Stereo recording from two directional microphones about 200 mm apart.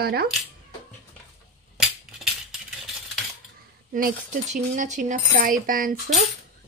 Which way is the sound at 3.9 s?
40° right (ahead or behind).